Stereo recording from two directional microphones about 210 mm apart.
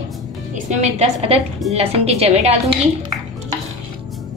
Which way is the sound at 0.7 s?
35° right (ahead or behind).